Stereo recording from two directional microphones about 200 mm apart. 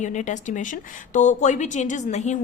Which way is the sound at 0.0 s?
35° left (ahead or behind).